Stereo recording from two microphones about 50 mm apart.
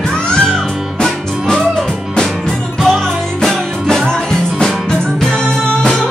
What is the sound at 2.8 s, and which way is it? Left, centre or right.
Music, centre.